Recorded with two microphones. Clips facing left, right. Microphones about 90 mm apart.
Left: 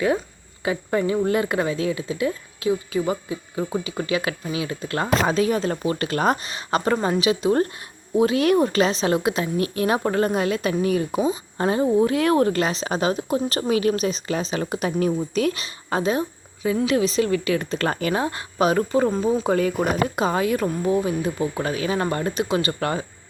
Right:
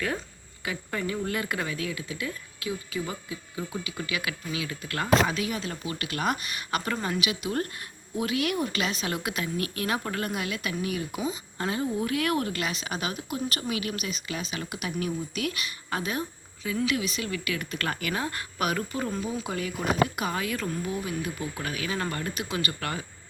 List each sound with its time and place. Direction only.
0.6 s speech: 30° left (ahead or behind); by 19.9 s 45° left (ahead or behind)
20.1 s speech: 30° left (ahead or behind)